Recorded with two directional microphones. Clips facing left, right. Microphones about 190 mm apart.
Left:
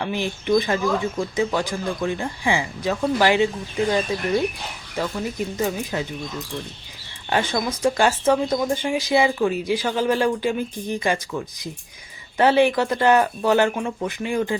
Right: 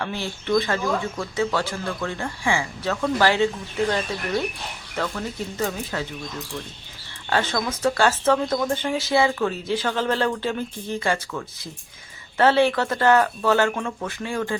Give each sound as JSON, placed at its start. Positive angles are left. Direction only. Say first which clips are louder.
{"t": 0.0, "sound": "speech", "louder": "left 4 dB", "side_deg": 15}
{"t": 7.3, "sound": "speech", "louder": "left 1 dB", "side_deg": 15}